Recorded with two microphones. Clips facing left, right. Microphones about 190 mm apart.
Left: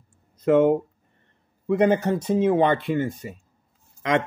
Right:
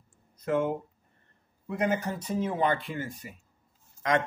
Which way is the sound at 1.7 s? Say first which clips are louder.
Left 9 dB; 80° left.